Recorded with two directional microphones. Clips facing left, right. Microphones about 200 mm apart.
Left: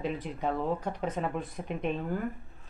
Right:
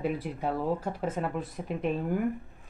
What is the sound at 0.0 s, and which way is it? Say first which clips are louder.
Speech: right 2 dB; 10° right (ahead or behind).